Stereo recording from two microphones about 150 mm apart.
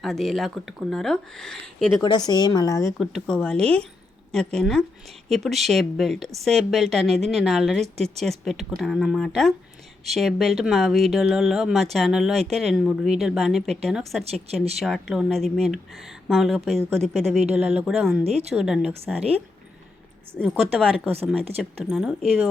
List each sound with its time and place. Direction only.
0.0 s speech: centre (ahead or behind)
2.0 s speech: 25° left (ahead or behind)
3.0 s speech: centre (ahead or behind)
14.3 s speech: 45° right (ahead or behind)
14.8 s speech: centre (ahead or behind)
20.3 s speech: centre (ahead or behind)